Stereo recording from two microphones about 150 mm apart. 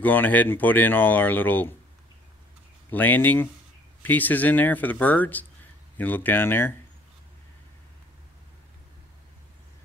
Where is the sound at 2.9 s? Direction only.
10° left (ahead or behind).